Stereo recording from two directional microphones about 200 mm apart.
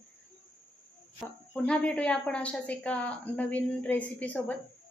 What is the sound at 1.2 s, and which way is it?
A woman's voice, 5° left (ahead or behind).